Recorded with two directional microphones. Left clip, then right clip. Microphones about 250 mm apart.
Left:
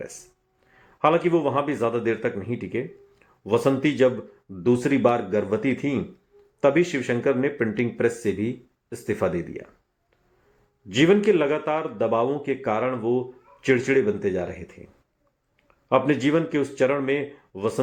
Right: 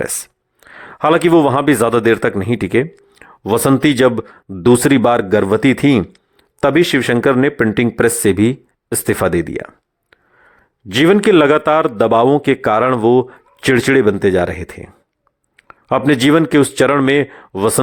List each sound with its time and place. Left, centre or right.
0.6 s a man's voice: right
10.8 s a man's voice: right